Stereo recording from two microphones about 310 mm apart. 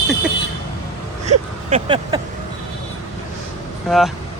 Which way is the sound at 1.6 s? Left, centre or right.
Centre.